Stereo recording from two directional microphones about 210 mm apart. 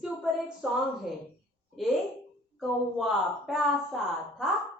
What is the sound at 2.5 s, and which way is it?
A woman's voice, centre (ahead or behind).